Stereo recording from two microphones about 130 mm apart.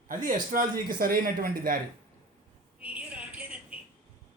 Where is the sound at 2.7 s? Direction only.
10° right (ahead or behind).